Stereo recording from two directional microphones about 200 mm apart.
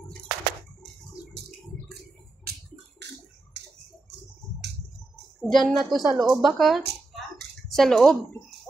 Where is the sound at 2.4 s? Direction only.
50° right (ahead or behind).